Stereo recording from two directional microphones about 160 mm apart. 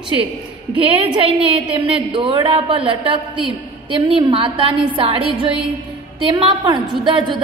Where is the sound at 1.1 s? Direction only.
35° right (ahead or behind).